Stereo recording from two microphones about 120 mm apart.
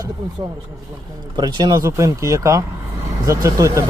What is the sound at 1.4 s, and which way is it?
Speech, 35° right (ahead or behind).